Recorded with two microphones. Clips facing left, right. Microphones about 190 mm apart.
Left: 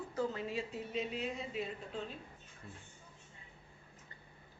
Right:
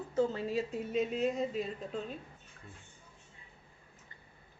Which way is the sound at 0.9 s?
45° right (ahead or behind).